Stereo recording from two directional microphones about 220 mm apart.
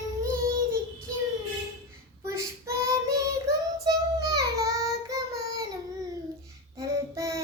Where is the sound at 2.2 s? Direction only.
15° right (ahead or behind).